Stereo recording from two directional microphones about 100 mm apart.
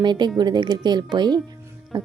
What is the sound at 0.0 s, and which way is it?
Speech, 50° right (ahead or behind).